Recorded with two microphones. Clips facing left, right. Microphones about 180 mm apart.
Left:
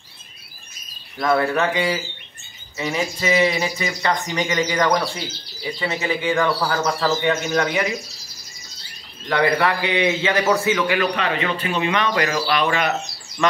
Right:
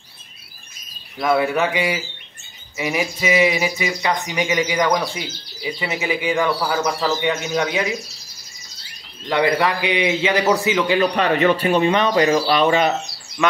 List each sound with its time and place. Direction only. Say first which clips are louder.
1.2 s speech: right 1 dB; 10° right (ahead or behind)
9.3 s speech: right 1 dB; 20° right (ahead or behind)
11.1 s speech: right 6 dB; 40° right (ahead or behind)